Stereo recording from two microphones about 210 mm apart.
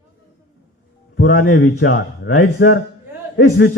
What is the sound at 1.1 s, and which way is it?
Speech, 55° left (ahead or behind).